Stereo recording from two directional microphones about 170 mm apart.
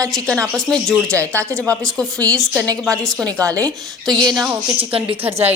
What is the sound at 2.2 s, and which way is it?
A woman's voice, 5° left (ahead or behind).